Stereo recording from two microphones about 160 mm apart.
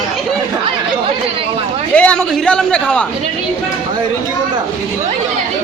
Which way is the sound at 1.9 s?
5° left (ahead or behind).